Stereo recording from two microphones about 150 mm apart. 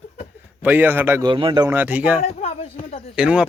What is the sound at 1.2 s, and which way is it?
Speech, 35° right (ahead or behind).